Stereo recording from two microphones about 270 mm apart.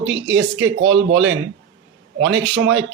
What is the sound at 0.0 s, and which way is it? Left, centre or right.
Speech, right.